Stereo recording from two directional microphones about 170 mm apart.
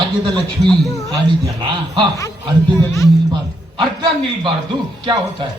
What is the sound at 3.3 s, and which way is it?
A man's voice, 25° right (ahead or behind).